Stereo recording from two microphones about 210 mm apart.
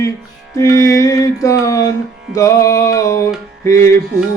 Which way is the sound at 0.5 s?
15° left (ahead or behind).